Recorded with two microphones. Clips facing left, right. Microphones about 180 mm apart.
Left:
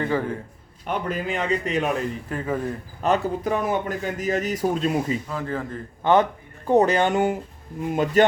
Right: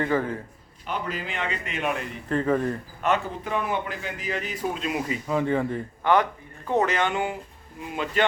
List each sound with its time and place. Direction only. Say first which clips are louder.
0.9 s speech: left 5 dB; 50° left (ahead or behind)
2.3 s speech: right 6 dB; 10° left (ahead or behind)
3.0 s speech: left 4 dB; 40° left (ahead or behind)
5.3 s speech: right 5 dB; centre (ahead or behind)
6.0 s a man's voice: left 3 dB; 25° left (ahead or behind)
6.7 s a man's voice: left 5 dB; 35° left (ahead or behind)